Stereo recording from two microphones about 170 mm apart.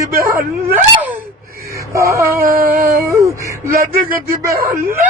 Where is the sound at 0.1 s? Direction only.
60° right (ahead or behind).